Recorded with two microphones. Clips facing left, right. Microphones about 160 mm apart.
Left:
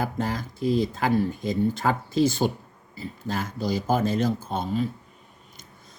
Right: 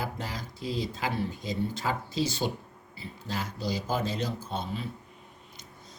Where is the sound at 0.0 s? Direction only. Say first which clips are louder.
Left 8 dB; 50° left (ahead or behind).